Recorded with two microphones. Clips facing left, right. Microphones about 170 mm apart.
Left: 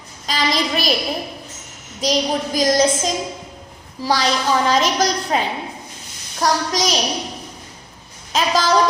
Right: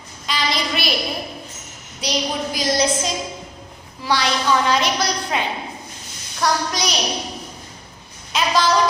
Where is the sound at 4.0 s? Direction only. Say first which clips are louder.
Left 2 dB; 40° left (ahead or behind).